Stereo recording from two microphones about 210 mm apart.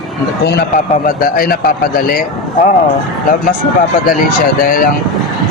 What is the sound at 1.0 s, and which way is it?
Speech, 45° left (ahead or behind).